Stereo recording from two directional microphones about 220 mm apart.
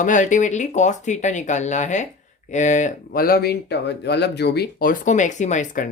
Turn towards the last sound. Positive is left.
turn(degrees=35)  # may be behind; listen again after turning